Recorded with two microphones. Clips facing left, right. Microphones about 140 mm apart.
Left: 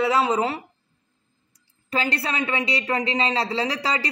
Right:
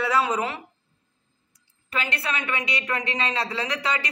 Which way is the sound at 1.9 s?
35° left (ahead or behind).